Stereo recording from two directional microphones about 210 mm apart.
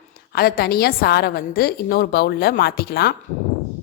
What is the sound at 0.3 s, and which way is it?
A woman's voice, 45° left (ahead or behind).